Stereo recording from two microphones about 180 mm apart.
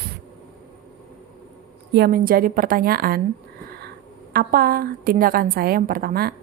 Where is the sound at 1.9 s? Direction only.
55° right (ahead or behind).